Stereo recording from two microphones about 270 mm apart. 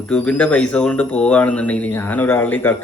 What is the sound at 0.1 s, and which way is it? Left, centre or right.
Speech, centre.